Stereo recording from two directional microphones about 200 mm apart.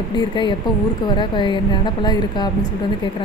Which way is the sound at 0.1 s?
25° left (ahead or behind).